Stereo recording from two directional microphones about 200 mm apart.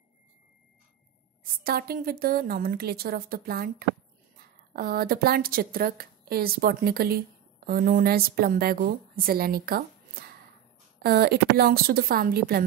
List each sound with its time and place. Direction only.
1.6 s a woman's voice: 50° right (ahead or behind)
4.7 s a woman's voice: 50° right (ahead or behind)